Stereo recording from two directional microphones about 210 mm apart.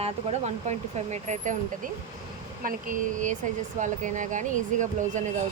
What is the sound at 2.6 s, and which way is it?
Speech, 40° right (ahead or behind).